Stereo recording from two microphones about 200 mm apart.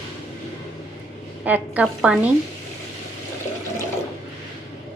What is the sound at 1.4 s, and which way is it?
Speech, 5° right (ahead or behind).